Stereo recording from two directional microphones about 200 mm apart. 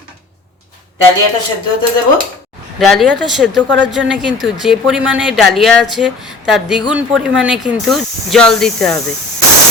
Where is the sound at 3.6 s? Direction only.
65° right (ahead or behind).